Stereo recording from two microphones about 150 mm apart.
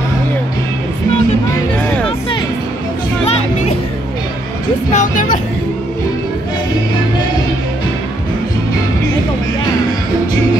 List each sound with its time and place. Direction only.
1.9 s music: 10° left (ahead or behind)
4.9 s music: 60° left (ahead or behind)